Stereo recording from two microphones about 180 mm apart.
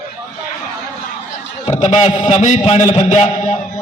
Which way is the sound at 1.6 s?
40° left (ahead or behind).